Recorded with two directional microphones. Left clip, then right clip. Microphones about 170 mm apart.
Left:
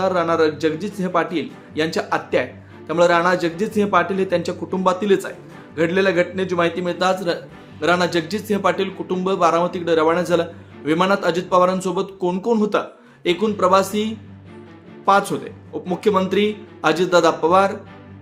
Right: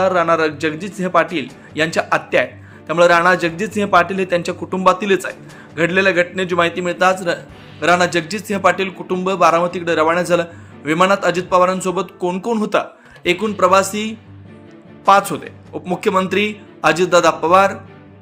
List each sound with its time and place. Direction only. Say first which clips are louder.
0.0 s a man's voice: right 3 dB; 15° right (ahead or behind)